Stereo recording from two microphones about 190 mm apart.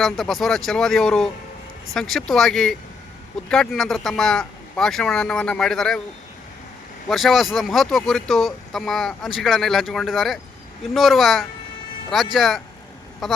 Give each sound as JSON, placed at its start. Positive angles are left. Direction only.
{"t": 0.0, "sound": "speech", "side_deg": 0}
{"t": 7.1, "sound": "speech", "side_deg": 0}